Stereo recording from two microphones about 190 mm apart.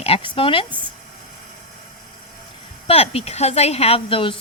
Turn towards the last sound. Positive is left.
turn(degrees=30)  # may be behind; listen again after turning